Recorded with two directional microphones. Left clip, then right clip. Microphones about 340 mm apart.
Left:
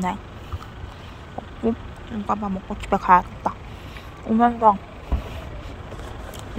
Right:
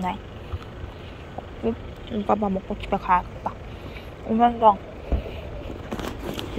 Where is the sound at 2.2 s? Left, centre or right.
Centre.